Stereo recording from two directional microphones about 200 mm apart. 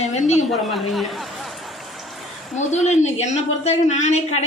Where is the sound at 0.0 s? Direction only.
35° left (ahead or behind).